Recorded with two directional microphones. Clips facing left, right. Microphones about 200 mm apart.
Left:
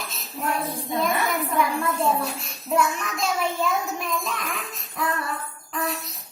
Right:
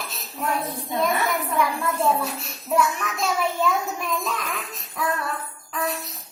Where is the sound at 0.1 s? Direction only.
Centre (ahead or behind).